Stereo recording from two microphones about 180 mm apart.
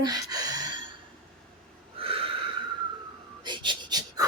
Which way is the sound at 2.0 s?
30° right (ahead or behind).